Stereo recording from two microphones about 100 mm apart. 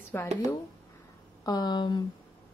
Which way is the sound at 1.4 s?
45° left (ahead or behind).